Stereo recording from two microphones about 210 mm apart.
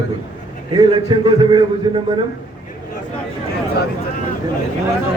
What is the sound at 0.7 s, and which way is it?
A man's voice, 20° right (ahead or behind).